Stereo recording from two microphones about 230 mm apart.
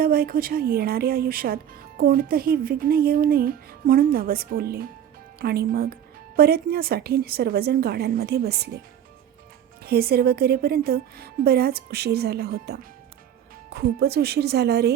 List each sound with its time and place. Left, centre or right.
0.0 s speech: right
9.8 s speech: right